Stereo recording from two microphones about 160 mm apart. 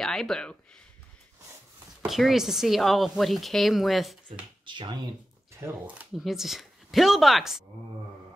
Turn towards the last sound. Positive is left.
turn(degrees=0)  # may be behind; listen again after turning